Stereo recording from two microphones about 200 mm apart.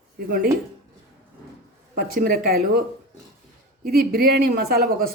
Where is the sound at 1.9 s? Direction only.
45° right (ahead or behind).